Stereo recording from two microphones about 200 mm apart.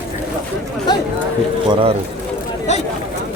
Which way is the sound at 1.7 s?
30° right (ahead or behind).